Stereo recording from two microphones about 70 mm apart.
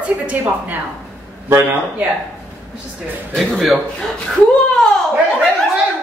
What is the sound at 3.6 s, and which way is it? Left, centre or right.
Speech, centre.